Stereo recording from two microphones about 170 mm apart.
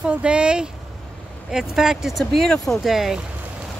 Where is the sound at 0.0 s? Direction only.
5° right (ahead or behind).